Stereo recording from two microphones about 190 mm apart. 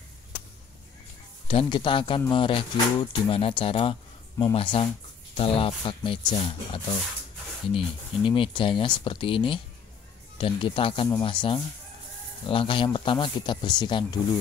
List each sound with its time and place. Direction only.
1.5 s speech: 25° left (ahead or behind)